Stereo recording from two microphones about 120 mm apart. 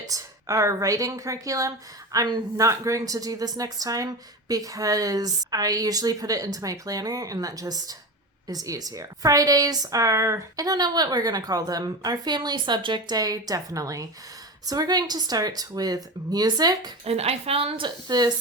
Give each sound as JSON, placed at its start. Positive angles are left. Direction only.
{"t": 0.1, "sound": "speech", "side_deg": -25}
{"t": 17.1, "sound": "speech", "side_deg": -55}